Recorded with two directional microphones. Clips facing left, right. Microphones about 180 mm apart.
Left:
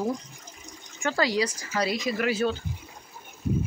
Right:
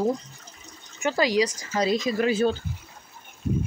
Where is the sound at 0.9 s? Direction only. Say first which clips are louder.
Right 3 dB; 15° right (ahead or behind).